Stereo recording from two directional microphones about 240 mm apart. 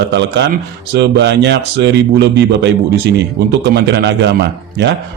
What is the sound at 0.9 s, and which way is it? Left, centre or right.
A man's voice, right.